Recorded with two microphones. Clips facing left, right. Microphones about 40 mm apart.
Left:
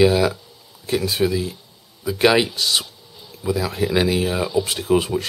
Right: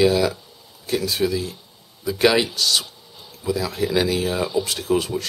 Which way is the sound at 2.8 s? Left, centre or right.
Centre.